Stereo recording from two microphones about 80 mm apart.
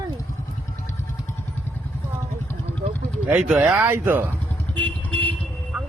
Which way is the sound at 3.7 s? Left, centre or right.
Right.